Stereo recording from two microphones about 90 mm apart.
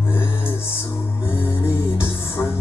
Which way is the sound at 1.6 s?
25° left (ahead or behind).